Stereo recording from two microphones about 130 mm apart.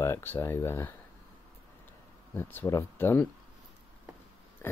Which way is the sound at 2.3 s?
15° left (ahead or behind).